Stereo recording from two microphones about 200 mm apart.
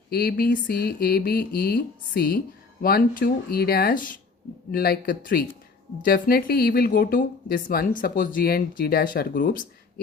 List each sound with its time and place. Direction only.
0.1 s speech: 50° left (ahead or behind)